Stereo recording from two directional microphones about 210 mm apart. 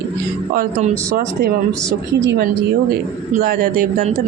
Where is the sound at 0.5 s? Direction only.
45° right (ahead or behind).